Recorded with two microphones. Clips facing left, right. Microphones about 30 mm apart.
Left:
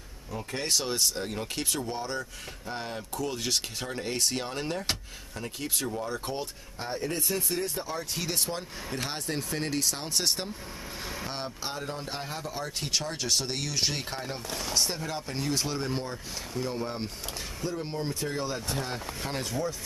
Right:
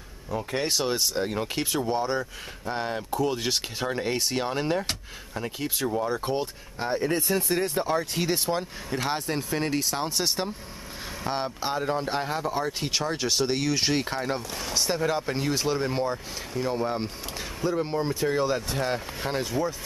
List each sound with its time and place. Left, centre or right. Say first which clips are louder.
0.6 s speech: right 2 dB; centre
7.5 s speech: right 7 dB; right
8.0 s speech: right 5 dB; centre
14.5 s speech: even; centre
14.9 s speech: right 8 dB; centre
17.9 s speech: right 7 dB; right
19.3 s speech: right 6 dB; centre